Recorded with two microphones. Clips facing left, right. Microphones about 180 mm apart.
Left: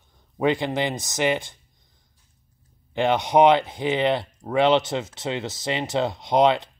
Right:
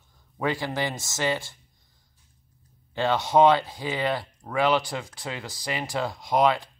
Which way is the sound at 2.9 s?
20° left (ahead or behind).